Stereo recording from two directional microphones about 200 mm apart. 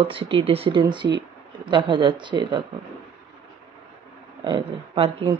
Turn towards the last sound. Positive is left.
turn(degrees=-25)  # may be behind; listen again after turning